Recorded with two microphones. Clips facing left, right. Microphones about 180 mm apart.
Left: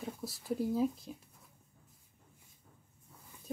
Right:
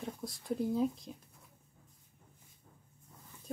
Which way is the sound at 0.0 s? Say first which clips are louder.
Even; 5° left (ahead or behind).